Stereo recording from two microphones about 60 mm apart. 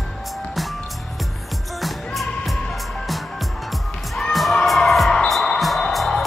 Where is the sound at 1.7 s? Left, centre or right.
Centre.